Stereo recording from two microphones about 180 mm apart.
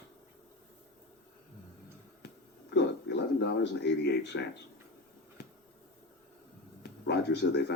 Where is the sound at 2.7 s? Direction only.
70° left (ahead or behind).